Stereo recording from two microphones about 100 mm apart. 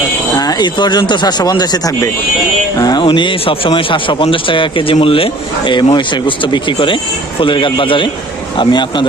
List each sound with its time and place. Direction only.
0.3 s speech: 40° left (ahead or behind)
2.7 s a sound: 40° left (ahead or behind)
3.0 s speech: 55° left (ahead or behind)